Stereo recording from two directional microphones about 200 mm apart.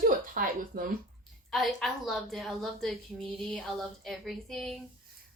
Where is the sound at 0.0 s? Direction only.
45° right (ahead or behind).